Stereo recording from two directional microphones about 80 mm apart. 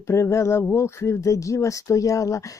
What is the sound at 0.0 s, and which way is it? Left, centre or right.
Speech, left.